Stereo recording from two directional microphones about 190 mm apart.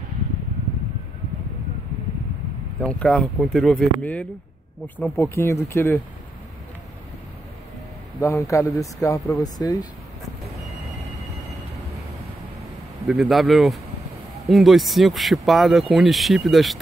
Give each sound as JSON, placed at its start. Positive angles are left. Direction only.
{"t": 2.8, "sound": "speech", "side_deg": 5}
{"t": 8.2, "sound": "speech", "side_deg": 15}
{"t": 13.0, "sound": "speech", "side_deg": 0}